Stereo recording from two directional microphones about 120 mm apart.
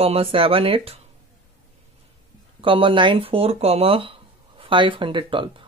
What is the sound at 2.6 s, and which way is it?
Speech, 45° right (ahead or behind).